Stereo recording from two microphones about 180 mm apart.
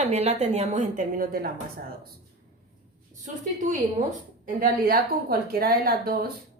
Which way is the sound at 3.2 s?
45° right (ahead or behind).